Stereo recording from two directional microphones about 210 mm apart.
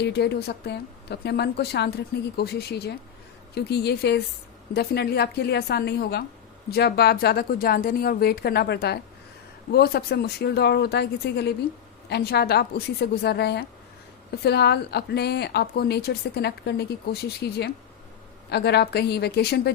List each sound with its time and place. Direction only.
0.0 s speech: 50° left (ahead or behind)